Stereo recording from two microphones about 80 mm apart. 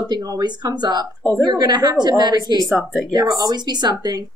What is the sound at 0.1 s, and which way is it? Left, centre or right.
A woman's voice, right.